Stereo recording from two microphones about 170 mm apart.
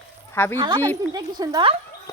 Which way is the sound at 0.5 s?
30° right (ahead or behind).